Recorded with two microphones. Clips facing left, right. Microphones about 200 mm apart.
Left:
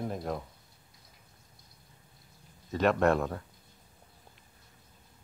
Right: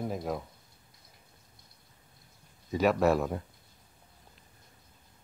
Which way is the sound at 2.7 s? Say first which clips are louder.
Right 1 dB; 5° right (ahead or behind).